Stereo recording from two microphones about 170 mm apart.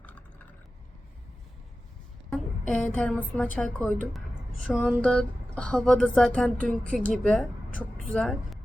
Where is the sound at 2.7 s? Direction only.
5° left (ahead or behind).